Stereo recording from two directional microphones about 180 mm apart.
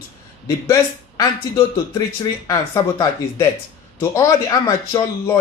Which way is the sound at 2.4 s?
20° left (ahead or behind).